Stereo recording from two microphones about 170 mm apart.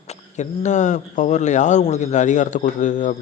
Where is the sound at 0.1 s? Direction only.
45° left (ahead or behind).